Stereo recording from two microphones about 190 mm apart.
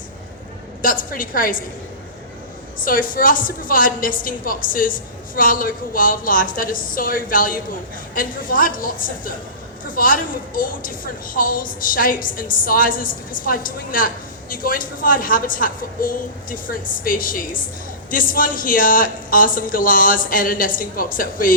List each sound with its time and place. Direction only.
0.8 s a woman's voice: 45° left (ahead or behind)
2.8 s a woman's voice: 45° left (ahead or behind)